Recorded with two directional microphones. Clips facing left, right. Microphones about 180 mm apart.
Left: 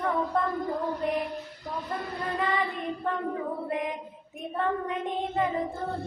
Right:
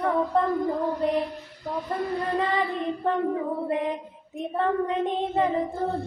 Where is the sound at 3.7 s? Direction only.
30° right (ahead or behind).